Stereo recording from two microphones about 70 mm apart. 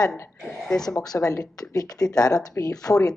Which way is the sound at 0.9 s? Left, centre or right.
Left.